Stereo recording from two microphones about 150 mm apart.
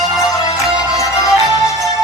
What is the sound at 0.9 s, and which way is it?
Music, 20° left (ahead or behind).